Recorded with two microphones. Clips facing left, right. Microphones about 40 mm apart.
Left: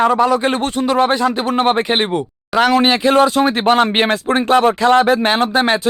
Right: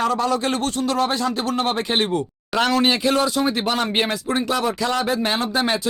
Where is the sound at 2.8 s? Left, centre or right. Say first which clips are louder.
Left 6 dB; left.